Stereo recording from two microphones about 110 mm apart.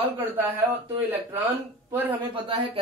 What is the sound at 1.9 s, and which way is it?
Speech, 15° right (ahead or behind).